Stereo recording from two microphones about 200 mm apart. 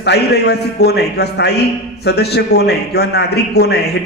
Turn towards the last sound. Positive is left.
turn(degrees=55)  # may be behind; listen again after turning